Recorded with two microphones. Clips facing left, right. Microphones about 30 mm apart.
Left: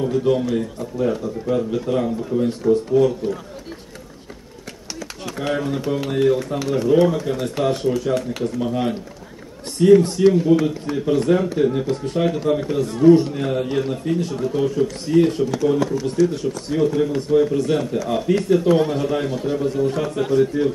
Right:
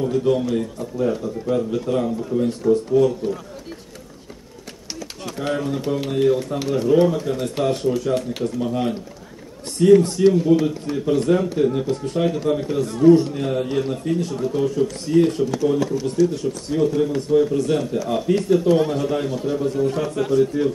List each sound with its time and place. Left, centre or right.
0.0 s a man's voice: centre
5.4 s a man's voice: centre
20.1 s a man's voice: left